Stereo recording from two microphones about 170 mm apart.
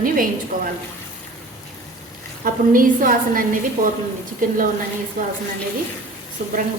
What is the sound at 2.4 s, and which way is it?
A woman's voice, 55° right (ahead or behind).